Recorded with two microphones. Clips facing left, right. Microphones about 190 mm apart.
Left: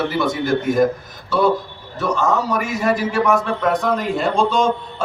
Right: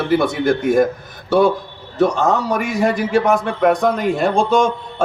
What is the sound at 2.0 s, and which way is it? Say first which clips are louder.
A man's voice: right 3 dB; 60° right (ahead or behind).